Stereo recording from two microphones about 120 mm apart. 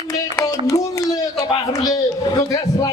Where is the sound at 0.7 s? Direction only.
25° left (ahead or behind).